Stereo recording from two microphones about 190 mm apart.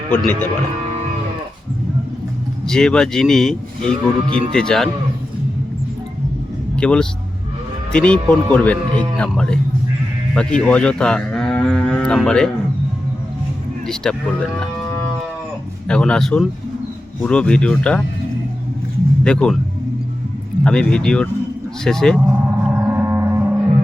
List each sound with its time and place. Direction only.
0.1 s speech: 10° left (ahead or behind)
2.6 s speech: 5° left (ahead or behind)
4.3 s speech: 30° right (ahead or behind)
4.5 s speech: 5° left (ahead or behind)
6.7 s speech: 5° left (ahead or behind)
13.8 s speech: 5° left (ahead or behind)
15.9 s speech: 5° left (ahead or behind)
19.2 s speech: 5° left (ahead or behind)
20.7 s speech: 5° left (ahead or behind)
22.3 s music: 10° right (ahead or behind)